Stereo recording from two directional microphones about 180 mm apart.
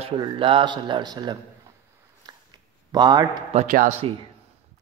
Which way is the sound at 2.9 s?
20° right (ahead or behind).